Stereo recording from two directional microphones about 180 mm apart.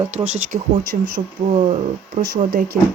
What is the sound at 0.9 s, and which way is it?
Speech, 40° right (ahead or behind).